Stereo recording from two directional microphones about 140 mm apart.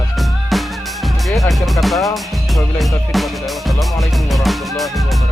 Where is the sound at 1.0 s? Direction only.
Centre (ahead or behind).